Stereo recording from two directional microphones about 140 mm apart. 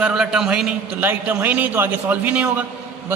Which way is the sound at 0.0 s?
5° right (ahead or behind).